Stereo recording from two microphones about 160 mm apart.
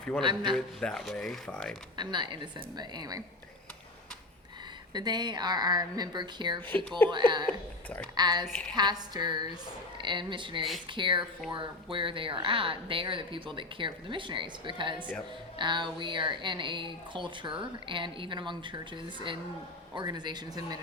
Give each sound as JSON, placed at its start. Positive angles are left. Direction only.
{"t": 0.2, "sound": "speech", "side_deg": -30}
{"t": 0.5, "sound": "speech", "side_deg": 5}
{"t": 2.0, "sound": "speech", "side_deg": -30}
{"t": 4.9, "sound": "speech", "side_deg": -25}
{"t": 19.9, "sound": "speech", "side_deg": -25}